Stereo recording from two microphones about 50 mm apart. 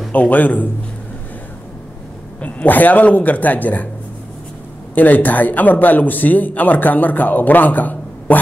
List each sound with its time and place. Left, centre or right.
0.1 s a man's voice: left
2.4 s a man's voice: left
4.9 s a man's voice: left